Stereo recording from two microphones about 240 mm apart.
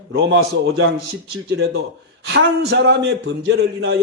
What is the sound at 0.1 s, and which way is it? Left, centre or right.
A man's voice, right.